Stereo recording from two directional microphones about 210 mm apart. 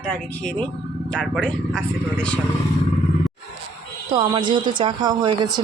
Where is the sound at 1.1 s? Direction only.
5° left (ahead or behind).